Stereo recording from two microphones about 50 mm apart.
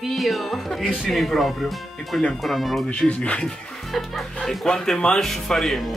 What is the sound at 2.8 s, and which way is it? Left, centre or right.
Music, left.